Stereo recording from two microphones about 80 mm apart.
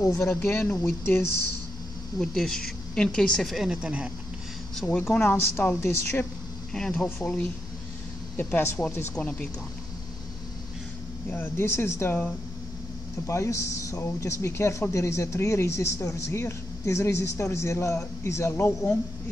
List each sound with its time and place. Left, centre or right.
0.0 s speech: left
0.3 s speech: left
2.1 s speech: centre
5.1 s speech: left
6.7 s speech: centre
11.2 s speech: left
13.3 s speech: left